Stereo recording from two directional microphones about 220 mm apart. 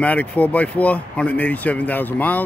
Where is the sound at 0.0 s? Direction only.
5° left (ahead or behind).